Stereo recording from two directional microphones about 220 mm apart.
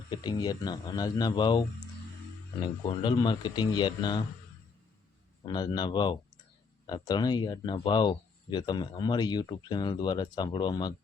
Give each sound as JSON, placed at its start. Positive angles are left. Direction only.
{"t": 0.1, "sound": "speech", "side_deg": 20}
{"t": 5.4, "sound": "speech", "side_deg": 20}